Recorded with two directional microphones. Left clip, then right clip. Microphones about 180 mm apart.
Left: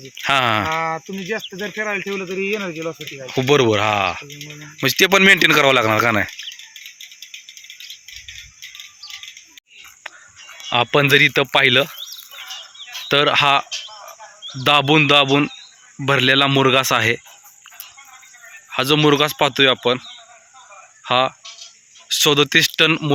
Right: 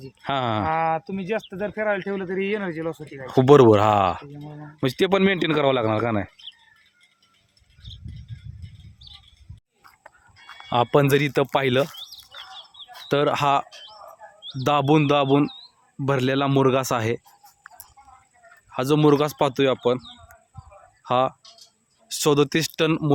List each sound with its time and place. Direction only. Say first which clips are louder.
0.3 s speech: left 6 dB; 15° right (ahead or behind)
3.2 s speech: right 2 dB; 40° right (ahead or behind)
4.6 s speech: left 7 dB; 15° right (ahead or behind)
10.7 s speech: left 4 dB; 15° right (ahead or behind)
13.1 s speech: left 6 dB; 10° right (ahead or behind)
18.7 s speech: left 4 dB; 5° right (ahead or behind)
21.0 s speech: left 4 dB; 10° right (ahead or behind)